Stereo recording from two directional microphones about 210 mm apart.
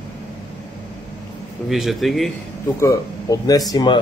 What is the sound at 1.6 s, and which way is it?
Speech, centre (ahead or behind).